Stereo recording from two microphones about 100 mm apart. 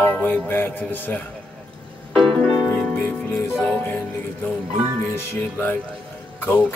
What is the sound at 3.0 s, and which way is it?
Music, 20° left (ahead or behind).